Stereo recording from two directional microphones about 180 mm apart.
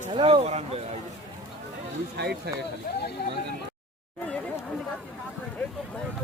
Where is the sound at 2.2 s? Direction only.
65° right (ahead or behind).